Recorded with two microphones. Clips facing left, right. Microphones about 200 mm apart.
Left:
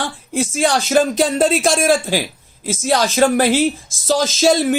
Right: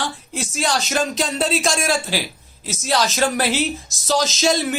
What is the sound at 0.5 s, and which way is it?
Speech, 50° left (ahead or behind).